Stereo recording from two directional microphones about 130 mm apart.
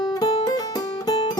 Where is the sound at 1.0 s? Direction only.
35° left (ahead or behind).